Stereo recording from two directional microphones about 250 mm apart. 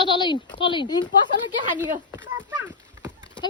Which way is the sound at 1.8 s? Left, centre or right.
Centre.